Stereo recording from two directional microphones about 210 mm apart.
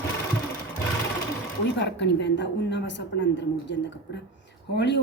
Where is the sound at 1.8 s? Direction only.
55° left (ahead or behind).